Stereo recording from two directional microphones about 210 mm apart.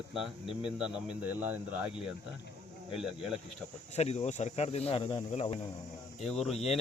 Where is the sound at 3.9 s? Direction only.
30° left (ahead or behind).